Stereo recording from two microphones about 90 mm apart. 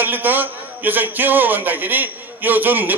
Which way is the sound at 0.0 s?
20° right (ahead or behind).